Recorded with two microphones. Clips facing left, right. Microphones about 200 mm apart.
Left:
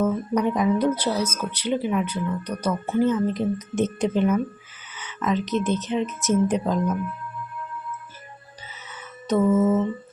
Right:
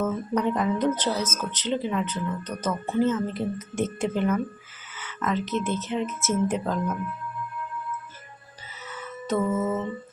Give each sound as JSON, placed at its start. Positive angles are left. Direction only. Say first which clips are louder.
{"t": 0.0, "sound": "speech", "louder": "left 3 dB", "side_deg": 10}
{"t": 9.2, "sound": "mantra", "louder": "left 6 dB", "side_deg": 20}